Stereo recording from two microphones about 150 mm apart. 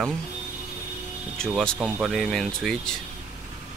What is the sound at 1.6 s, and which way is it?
Speech, 5° left (ahead or behind).